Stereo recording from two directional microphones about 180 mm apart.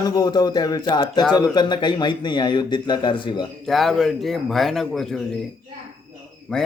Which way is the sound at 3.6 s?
Centre (ahead or behind).